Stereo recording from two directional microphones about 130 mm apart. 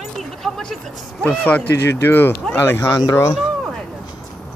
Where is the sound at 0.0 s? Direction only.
5° left (ahead or behind).